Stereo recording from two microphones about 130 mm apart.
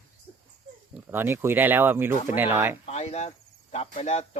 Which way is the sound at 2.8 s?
55° left (ahead or behind).